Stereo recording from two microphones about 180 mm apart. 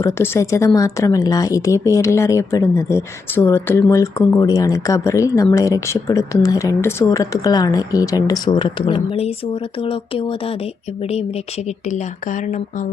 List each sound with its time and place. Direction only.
0.0 s speech: 15° left (ahead or behind)
11.9 s speech: 40° left (ahead or behind)